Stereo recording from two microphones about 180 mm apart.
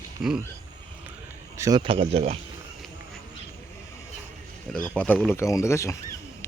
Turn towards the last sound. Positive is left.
turn(degrees=15)  # may be behind; listen again after turning